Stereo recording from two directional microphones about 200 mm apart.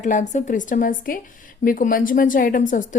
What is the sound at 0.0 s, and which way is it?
A woman's voice, 40° left (ahead or behind).